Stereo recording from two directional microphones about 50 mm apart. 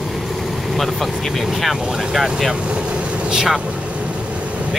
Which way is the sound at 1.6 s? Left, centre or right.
Centre.